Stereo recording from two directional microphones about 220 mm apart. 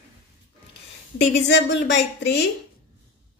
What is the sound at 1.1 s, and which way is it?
A woman's voice, 50° left (ahead or behind).